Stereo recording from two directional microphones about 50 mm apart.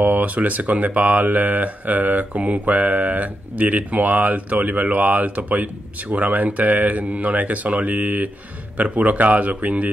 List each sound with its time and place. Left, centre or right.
0.0 s speech: right